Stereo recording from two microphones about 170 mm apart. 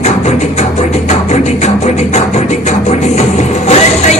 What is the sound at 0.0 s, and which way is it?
Music, 40° left (ahead or behind).